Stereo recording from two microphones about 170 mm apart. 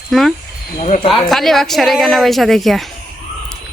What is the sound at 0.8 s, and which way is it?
Speech, 45° left (ahead or behind).